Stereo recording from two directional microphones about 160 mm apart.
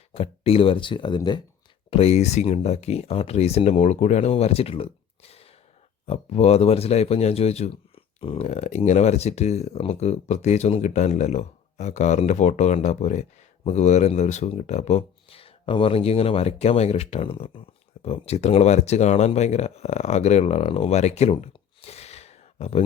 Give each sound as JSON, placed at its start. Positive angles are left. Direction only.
{"t": 0.1, "sound": "speech", "side_deg": 40}
{"t": 1.9, "sound": "a man's voice", "side_deg": 40}